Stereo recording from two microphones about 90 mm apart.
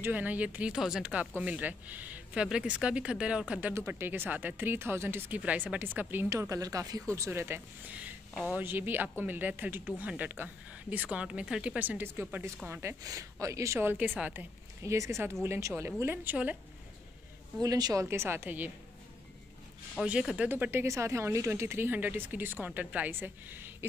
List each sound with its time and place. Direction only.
0.0 s speech: 20° right (ahead or behind)
3.7 s a woman's voice: 25° right (ahead or behind)
5.4 s a woman's voice: 15° right (ahead or behind)
6.5 s speech: 40° right (ahead or behind)
7.2 s a woman's voice: 25° right (ahead or behind)
13.0 s a woman's voice: 40° right (ahead or behind); by 14.4 s 20° right (ahead or behind)
14.8 s a woman's voice: 30° right (ahead or behind)
17.6 s a woman's voice: 45° right (ahead or behind)
18.0 s a woman's voice: 30° right (ahead or behind)
20.1 s speech: 10° right (ahead or behind)
20.4 s a woman's voice: 20° right (ahead or behind)
20.8 s a woman's voice: 35° right (ahead or behind)